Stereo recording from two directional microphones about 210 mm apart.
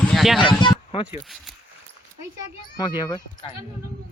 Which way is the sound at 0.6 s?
20° left (ahead or behind).